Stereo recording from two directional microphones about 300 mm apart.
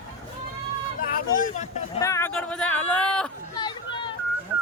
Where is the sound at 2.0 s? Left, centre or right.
Centre.